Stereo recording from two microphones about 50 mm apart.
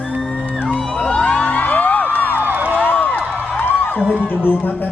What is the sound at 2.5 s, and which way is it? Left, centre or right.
Music, right.